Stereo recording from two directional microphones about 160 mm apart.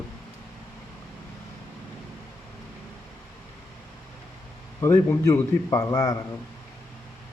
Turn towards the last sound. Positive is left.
turn(degrees=20)  # may be behind; listen again after turning